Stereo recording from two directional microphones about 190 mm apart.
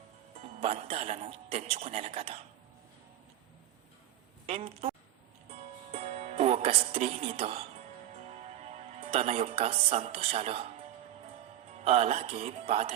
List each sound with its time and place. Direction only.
0.3 s speech: 35° right (ahead or behind)
4.4 s speech: 30° right (ahead or behind)
5.5 s music: 35° right (ahead or behind)
8.1 s speech: 35° right (ahead or behind)
11.7 s speech: 35° right (ahead or behind)